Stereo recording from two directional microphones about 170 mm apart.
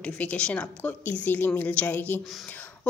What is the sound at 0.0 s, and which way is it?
Speech, 5° left (ahead or behind).